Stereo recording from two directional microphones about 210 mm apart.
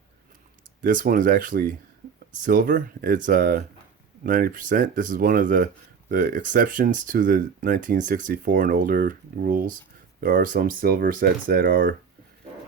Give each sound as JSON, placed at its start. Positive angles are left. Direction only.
{"t": 0.8, "sound": "speech", "side_deg": -40}